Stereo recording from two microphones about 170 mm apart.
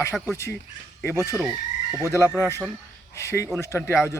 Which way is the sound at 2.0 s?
15° left (ahead or behind).